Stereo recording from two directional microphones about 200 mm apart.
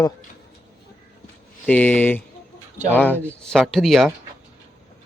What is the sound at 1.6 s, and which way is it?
A man's voice, 10° left (ahead or behind).